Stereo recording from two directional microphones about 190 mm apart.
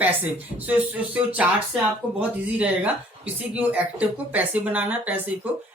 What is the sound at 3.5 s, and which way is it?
Speech, 5° right (ahead or behind).